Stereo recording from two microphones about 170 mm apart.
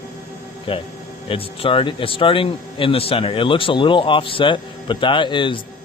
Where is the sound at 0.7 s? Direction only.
30° left (ahead or behind).